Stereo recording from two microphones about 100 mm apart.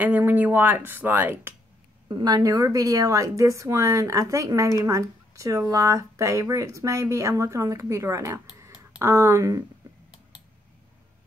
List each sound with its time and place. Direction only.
0.0 s speech: 15° right (ahead or behind)
2.0 s a woman's voice: 45° right (ahead or behind)